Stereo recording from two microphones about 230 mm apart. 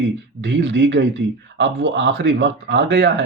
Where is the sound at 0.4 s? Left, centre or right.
Right.